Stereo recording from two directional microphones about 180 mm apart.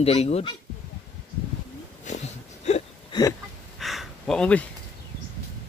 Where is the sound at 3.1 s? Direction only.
25° left (ahead or behind).